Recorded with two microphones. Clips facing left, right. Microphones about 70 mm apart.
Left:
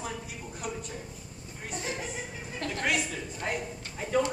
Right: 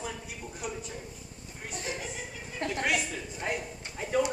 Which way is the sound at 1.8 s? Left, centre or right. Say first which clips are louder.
Left 1 dB; left.